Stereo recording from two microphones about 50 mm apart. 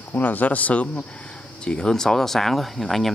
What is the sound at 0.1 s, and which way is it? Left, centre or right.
Speech, left.